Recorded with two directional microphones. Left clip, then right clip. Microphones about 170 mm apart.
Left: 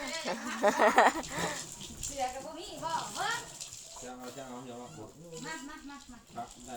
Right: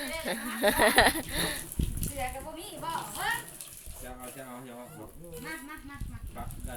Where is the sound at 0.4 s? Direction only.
25° right (ahead or behind).